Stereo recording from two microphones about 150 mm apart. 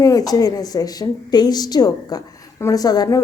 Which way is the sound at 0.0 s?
25° left (ahead or behind).